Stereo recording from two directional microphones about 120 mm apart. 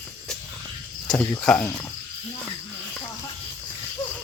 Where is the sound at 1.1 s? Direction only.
30° left (ahead or behind).